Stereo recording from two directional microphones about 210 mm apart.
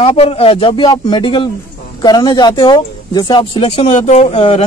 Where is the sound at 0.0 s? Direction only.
30° left (ahead or behind).